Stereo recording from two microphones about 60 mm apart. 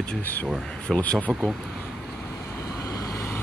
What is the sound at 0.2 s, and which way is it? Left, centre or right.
Speech, left.